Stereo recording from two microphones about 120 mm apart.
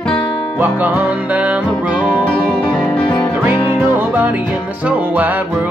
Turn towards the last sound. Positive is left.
turn(degrees=-15)  # may be behind; listen again after turning